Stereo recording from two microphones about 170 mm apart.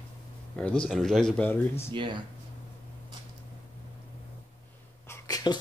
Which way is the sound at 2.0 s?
30° right (ahead or behind).